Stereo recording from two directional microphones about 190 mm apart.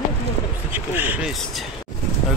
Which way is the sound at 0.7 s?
10° right (ahead or behind).